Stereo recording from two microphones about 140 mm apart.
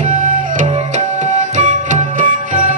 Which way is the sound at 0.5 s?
60° right (ahead or behind).